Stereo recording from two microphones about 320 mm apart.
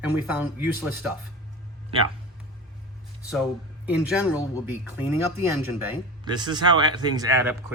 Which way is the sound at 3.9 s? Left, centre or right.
Centre.